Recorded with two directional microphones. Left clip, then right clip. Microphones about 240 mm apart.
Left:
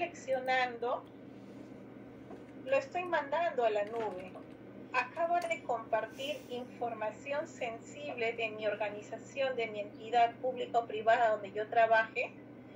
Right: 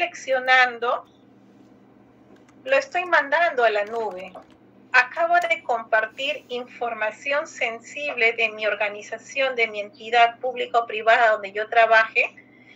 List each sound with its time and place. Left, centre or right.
0.0 s a woman's voice: right
2.6 s a woman's voice: right
4.9 s a woman's voice: right